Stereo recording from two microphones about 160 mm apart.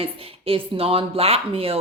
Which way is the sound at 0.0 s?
35° right (ahead or behind).